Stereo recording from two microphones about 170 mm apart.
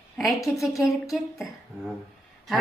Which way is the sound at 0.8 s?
20° left (ahead or behind).